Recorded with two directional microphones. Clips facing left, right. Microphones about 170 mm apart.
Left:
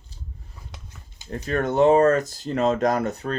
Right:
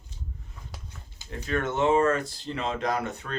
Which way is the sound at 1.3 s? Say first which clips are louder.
Left 5 dB; 40° left (ahead or behind).